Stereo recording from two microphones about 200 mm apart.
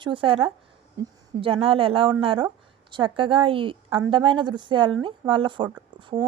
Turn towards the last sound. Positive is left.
turn(degrees=-25)  # may be behind; listen again after turning